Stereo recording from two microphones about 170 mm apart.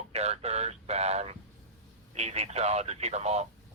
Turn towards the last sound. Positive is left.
turn(degrees=-40)  # may be behind; listen again after turning